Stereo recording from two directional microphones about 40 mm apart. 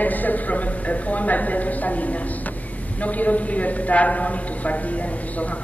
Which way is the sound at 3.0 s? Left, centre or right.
Left.